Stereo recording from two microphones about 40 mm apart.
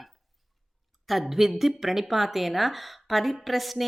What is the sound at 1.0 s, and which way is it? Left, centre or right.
Speech, centre.